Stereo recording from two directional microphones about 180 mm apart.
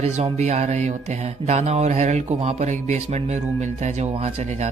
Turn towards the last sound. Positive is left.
turn(degrees=-40)  # may be behind; listen again after turning